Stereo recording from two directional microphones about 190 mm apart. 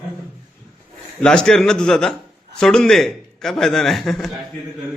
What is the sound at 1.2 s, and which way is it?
A man's voice, 5° left (ahead or behind).